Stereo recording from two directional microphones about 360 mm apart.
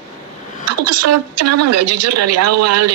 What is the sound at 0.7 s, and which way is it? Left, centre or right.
A woman's voice, right.